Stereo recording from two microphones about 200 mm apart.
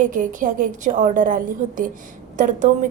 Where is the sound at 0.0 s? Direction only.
40° right (ahead or behind).